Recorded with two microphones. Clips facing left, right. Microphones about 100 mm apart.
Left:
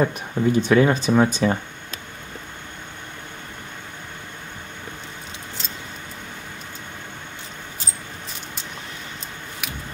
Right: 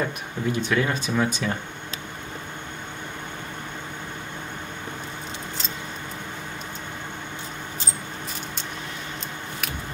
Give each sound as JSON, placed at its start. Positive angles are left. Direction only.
{"t": 0.0, "sound": "speech", "side_deg": 35}